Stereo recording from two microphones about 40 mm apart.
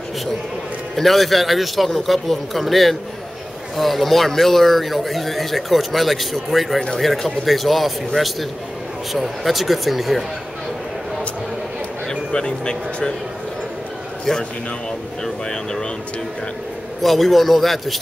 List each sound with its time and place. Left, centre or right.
0.9 s a man's voice: centre
12.1 s speech: left
15.2 s speech: centre
17.0 s a man's voice: centre